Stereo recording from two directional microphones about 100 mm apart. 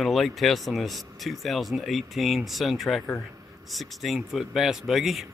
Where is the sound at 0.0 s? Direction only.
Centre (ahead or behind).